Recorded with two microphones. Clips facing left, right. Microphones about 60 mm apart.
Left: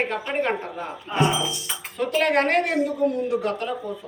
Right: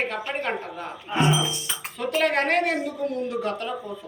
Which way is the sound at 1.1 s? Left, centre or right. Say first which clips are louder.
Even; right.